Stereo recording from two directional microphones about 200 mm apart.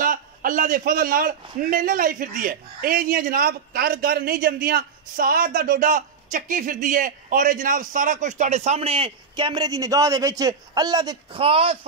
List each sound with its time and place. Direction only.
0.0 s a man's voice: 40° right (ahead or behind)